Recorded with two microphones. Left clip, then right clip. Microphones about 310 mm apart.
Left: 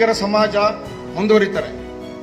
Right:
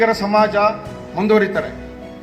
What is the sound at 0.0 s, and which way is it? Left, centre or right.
A man's voice, left.